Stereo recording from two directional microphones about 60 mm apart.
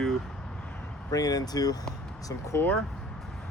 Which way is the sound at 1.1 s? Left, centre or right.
Left.